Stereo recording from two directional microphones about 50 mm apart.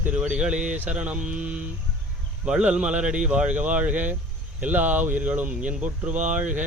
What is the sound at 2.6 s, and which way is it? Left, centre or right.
Speech, right.